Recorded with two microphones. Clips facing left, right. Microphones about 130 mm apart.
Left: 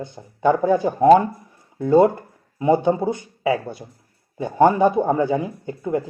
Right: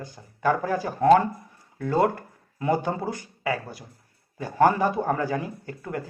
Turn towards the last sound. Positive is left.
turn(degrees=20)  # may be behind; listen again after turning